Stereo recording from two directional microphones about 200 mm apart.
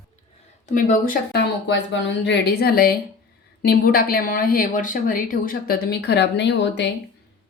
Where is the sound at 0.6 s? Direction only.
40° left (ahead or behind); by 6.9 s 60° left (ahead or behind).